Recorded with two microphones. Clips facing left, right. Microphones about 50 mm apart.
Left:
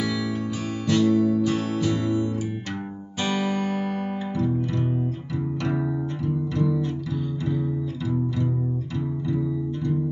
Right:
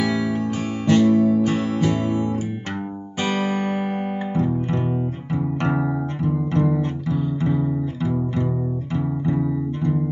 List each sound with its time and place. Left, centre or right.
0.0 s music: right
5.6 s music: right